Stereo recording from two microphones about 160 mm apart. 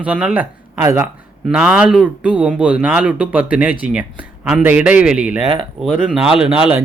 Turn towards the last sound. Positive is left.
turn(degrees=-5)  # may be behind; listen again after turning